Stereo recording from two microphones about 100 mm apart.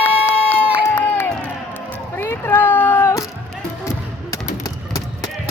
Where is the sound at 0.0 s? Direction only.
20° left (ahead or behind).